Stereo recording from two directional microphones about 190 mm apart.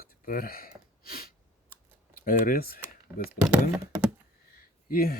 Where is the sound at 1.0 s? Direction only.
50° left (ahead or behind).